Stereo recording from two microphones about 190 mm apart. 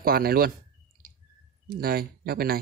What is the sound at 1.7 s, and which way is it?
Speech, 50° right (ahead or behind).